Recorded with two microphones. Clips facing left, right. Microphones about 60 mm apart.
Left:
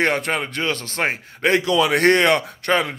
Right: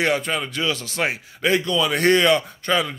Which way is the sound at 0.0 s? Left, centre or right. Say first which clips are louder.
Left 1 dB; left.